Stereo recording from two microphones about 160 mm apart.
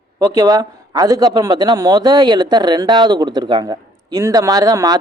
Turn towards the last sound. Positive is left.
turn(degrees=-25)  # may be behind; listen again after turning